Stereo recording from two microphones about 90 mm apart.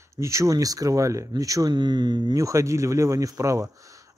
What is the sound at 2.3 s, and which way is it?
Speech, 35° right (ahead or behind).